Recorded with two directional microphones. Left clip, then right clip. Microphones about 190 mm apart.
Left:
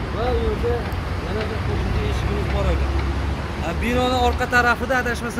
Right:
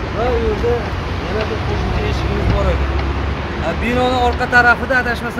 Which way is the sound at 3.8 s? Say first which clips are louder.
Right 4 dB; 30° left (ahead or behind).